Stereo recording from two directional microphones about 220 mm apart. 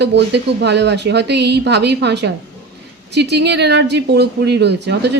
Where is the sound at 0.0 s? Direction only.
50° right (ahead or behind).